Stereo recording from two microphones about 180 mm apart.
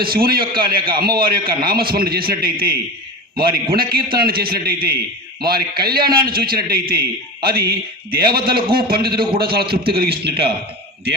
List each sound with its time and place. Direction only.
0.0 s a man's voice: 55° right (ahead or behind)